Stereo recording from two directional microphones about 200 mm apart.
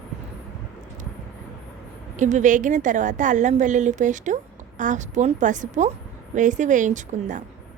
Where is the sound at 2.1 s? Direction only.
40° right (ahead or behind).